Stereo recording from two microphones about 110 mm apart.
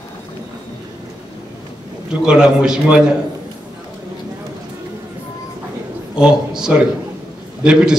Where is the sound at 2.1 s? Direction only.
5° right (ahead or behind).